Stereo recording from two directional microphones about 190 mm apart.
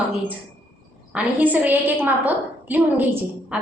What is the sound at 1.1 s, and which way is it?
A woman's voice, 10° right (ahead or behind).